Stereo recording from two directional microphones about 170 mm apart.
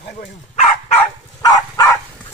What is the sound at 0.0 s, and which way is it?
Bow-wow, 75° left (ahead or behind).